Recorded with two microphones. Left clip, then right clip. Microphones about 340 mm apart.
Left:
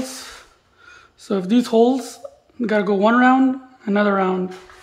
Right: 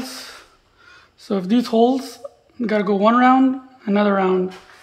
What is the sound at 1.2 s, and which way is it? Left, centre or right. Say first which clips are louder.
Speech: left 1 dB; centre.